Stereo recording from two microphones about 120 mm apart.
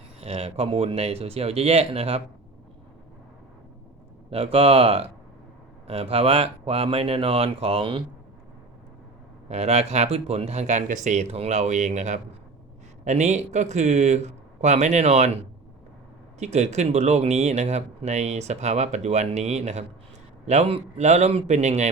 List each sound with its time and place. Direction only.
0.2 s speech: 55° right (ahead or behind)
4.3 s speech: 50° right (ahead or behind)
9.5 s speech: 65° right (ahead or behind)
16.4 s speech: 70° right (ahead or behind)